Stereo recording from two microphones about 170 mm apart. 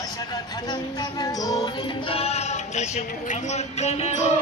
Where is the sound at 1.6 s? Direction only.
35° left (ahead or behind).